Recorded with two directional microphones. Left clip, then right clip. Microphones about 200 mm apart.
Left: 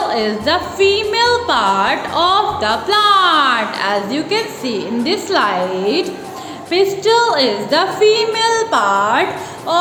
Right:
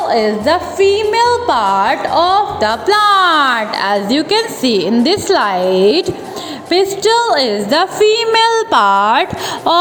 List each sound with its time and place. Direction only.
0.1 s a woman's voice: 25° right (ahead or behind); by 9.2 s 45° right (ahead or behind)